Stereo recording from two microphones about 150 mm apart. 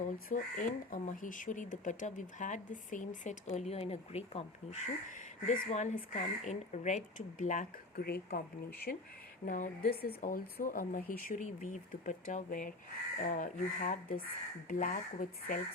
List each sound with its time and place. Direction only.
0.0 s speech: 60° left (ahead or behind)
7.9 s speech: 90° left
9.5 s speech: 65° left (ahead or behind)